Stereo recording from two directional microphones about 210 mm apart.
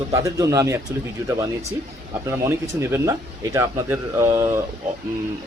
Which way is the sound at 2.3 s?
10° right (ahead or behind).